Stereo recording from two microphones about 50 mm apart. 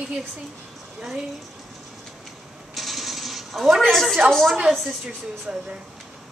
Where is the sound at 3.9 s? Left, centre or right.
Centre.